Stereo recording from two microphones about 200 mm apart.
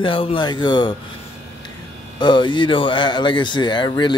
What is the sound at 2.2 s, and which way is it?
Speech, 20° left (ahead or behind).